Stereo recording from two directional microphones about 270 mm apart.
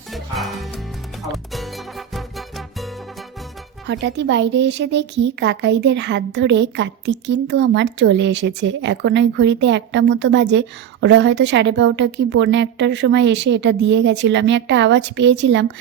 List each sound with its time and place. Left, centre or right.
0.1 s music: centre
3.8 s a woman's voice: right